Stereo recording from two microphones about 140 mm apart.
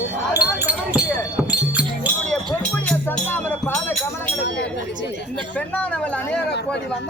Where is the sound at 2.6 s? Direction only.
10° left (ahead or behind).